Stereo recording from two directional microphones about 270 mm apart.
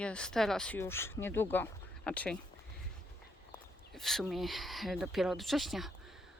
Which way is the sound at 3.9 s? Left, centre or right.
Centre.